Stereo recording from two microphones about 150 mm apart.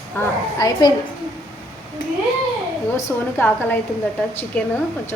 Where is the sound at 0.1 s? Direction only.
15° left (ahead or behind).